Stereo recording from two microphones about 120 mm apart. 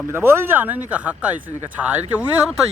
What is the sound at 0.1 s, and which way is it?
Speech, 20° right (ahead or behind).